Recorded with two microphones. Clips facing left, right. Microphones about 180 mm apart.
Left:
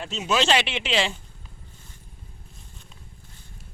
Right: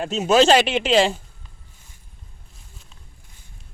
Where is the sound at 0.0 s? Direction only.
45° right (ahead or behind).